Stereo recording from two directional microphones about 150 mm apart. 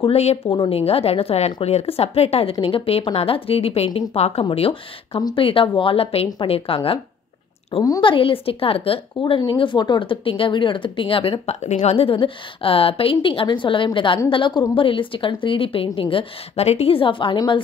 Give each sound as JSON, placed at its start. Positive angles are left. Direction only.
{"t": 0.0, "sound": "speech", "side_deg": 45}